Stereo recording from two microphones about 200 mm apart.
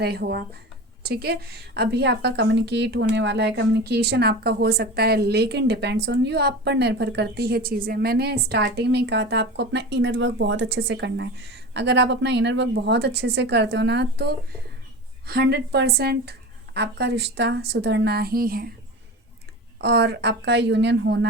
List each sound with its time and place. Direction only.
0.0 s a woman's voice: 55° right (ahead or behind)
19.8 s a woman's voice: 55° right (ahead or behind)